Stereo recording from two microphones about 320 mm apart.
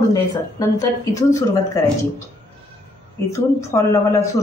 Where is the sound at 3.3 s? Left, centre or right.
Centre.